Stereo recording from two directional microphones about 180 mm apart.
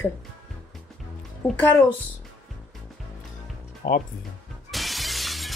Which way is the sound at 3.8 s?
50° left (ahead or behind).